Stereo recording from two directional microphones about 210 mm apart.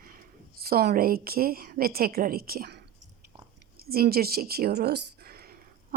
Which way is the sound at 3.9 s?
45° right (ahead or behind).